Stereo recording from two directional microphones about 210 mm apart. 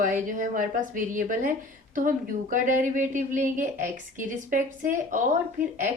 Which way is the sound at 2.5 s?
40° right (ahead or behind).